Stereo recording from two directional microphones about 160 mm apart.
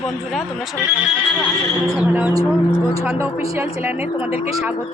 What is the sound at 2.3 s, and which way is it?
A woman's voice, 20° right (ahead or behind).